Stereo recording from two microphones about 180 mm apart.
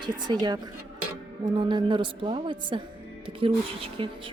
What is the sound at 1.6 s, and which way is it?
A woman's voice, 25° right (ahead or behind).